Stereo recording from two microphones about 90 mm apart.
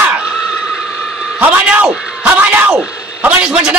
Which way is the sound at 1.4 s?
15° right (ahead or behind).